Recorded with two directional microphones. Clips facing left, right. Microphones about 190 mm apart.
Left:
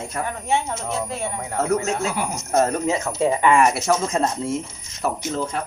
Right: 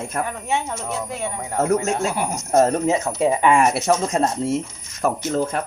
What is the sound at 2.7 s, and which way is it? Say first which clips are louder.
Speech: right 2 dB; 20° right (ahead or behind).